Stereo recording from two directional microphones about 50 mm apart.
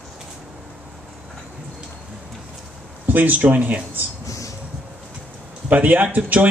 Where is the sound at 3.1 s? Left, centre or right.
Right.